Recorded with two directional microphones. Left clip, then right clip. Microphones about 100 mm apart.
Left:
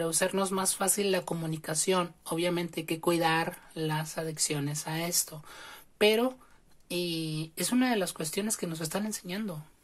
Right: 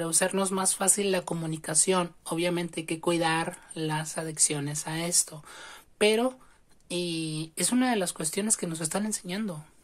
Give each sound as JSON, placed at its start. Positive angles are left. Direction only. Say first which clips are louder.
{"t": 0.0, "sound": "speech", "louder": "right 1 dB", "side_deg": -25}
{"t": 3.8, "sound": "speech", "louder": "right 1 dB", "side_deg": -25}